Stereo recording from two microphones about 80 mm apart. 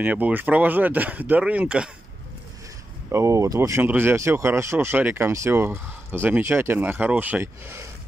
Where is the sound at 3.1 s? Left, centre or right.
Right.